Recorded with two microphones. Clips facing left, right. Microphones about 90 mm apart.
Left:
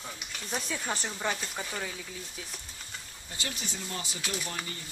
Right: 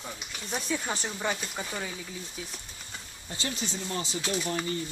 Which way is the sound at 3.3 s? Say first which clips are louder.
Right 4 dB; 25° right (ahead or behind).